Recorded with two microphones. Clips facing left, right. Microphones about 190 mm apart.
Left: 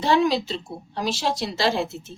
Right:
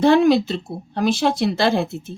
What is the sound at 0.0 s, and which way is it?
Speech, 55° right (ahead or behind).